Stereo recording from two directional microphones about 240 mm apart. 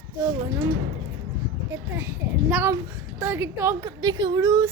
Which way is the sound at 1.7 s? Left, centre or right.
Centre.